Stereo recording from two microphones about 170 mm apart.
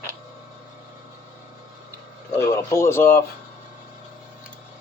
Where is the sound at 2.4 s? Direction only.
15° left (ahead or behind).